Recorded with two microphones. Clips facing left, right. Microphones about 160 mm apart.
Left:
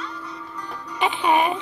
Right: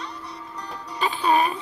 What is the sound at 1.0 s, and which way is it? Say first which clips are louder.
Music: left 1 dB; 20° left (ahead or behind).